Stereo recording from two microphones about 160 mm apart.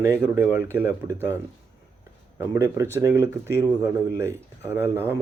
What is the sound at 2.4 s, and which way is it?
Speech, 15° right (ahead or behind).